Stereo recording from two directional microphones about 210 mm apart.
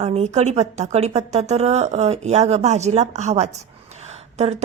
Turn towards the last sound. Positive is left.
turn(degrees=-30)  # may be behind; listen again after turning